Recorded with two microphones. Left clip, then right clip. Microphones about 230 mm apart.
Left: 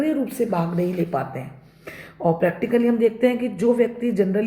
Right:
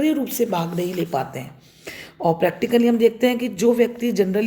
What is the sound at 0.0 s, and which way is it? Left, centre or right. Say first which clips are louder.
Speech: right 2 dB; right.